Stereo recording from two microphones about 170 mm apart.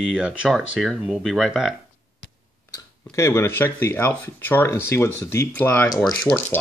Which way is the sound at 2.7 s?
15° left (ahead or behind).